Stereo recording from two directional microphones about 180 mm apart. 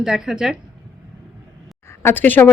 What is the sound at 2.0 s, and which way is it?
Speech, 10° left (ahead or behind).